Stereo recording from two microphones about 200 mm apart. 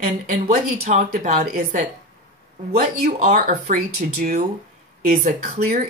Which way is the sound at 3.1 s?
40° right (ahead or behind).